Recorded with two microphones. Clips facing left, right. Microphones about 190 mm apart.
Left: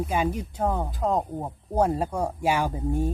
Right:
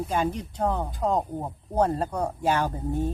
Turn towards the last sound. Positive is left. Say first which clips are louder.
# left 1 dB
turn(degrees=10)  # may be behind; listen again after turning